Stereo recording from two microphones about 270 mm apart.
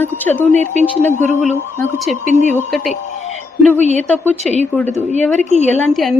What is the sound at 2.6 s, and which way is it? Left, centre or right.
Speech, centre.